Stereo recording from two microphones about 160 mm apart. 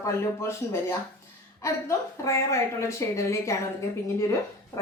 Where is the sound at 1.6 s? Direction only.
20° left (ahead or behind).